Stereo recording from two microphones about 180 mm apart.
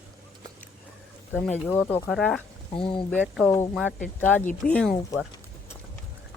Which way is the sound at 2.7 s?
30° left (ahead or behind).